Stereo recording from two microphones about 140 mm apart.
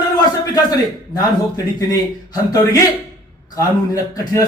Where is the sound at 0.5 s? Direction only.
25° left (ahead or behind).